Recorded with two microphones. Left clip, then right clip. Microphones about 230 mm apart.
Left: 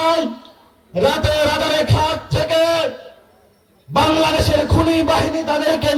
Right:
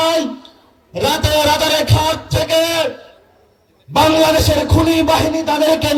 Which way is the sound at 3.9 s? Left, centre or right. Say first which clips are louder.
Right 3 dB; right.